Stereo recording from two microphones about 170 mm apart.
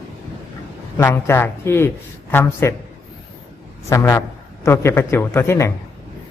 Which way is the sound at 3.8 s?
20° left (ahead or behind).